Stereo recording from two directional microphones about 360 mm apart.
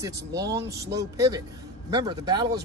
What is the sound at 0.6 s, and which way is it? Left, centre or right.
Speech, right.